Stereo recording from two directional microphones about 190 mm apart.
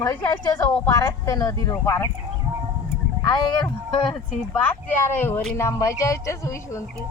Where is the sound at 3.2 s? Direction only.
20° left (ahead or behind).